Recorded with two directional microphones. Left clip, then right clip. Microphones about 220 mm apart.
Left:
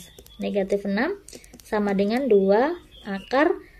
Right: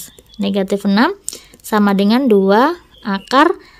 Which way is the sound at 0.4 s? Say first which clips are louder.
Right 6 dB; 45° right (ahead or behind).